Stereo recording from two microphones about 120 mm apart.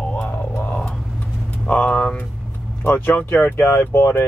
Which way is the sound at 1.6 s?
10° left (ahead or behind).